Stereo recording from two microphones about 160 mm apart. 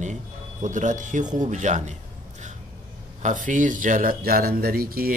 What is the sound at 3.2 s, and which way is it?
Speech, 55° right (ahead or behind).